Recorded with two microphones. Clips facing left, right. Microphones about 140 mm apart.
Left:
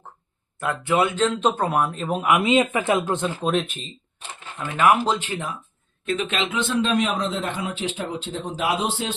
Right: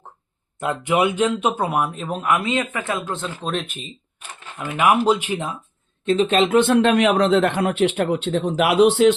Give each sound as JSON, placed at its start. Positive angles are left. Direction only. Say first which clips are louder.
{"t": 0.6, "sound": "speech", "louder": "right 2 dB", "side_deg": -20}
{"t": 3.4, "sound": "speech", "louder": "left 3 dB", "side_deg": 0}
{"t": 4.6, "sound": "speech", "louder": "right 2 dB", "side_deg": -10}
{"t": 6.1, "sound": "speech", "louder": "right 7 dB", "side_deg": -30}
{"t": 6.3, "sound": "speech", "louder": "right 10 dB", "side_deg": -40}
{"t": 6.6, "sound": "a man's voice", "louder": "right 5 dB", "side_deg": -60}